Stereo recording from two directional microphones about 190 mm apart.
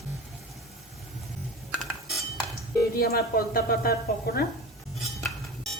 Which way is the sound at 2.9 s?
55° left (ahead or behind).